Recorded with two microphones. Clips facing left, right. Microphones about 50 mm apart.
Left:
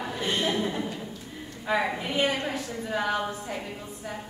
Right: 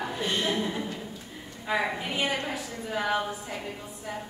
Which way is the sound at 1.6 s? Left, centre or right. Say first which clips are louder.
Left 1 dB; centre.